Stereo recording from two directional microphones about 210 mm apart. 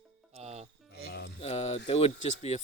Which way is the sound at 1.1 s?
55° left (ahead or behind).